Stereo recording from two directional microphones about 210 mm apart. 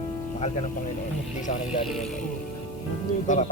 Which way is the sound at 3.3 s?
35° left (ahead or behind).